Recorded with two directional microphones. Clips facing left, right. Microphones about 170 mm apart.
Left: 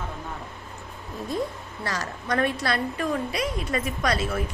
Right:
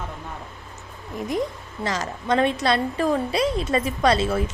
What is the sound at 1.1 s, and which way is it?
A woman's voice, 15° right (ahead or behind).